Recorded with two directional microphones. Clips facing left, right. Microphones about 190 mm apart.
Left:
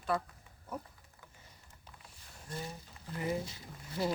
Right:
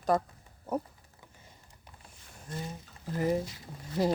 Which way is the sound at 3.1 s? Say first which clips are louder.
Right 7 dB; 40° right (ahead or behind).